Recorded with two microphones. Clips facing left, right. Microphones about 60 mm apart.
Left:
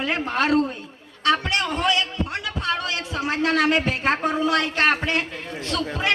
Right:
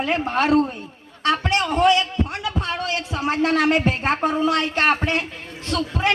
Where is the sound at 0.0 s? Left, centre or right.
Right.